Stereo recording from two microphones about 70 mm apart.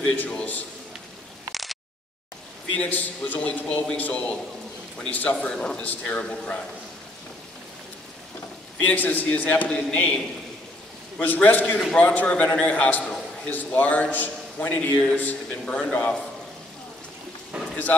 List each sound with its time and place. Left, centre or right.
0.1 s a man's voice: centre
1.5 s a sound: centre
2.7 s a man's voice: left
8.8 s a man's voice: left
9.7 s a man's voice: centre
17.5 s a sound: centre